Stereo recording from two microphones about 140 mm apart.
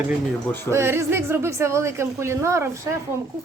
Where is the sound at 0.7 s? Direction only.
20° right (ahead or behind).